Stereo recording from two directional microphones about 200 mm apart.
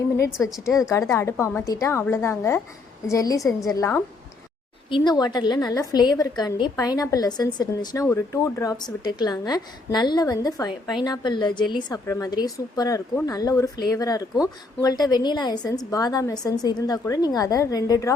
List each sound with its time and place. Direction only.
0.4 s a woman's voice: 15° left (ahead or behind)